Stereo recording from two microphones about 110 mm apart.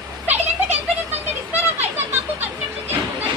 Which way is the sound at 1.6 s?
15° right (ahead or behind).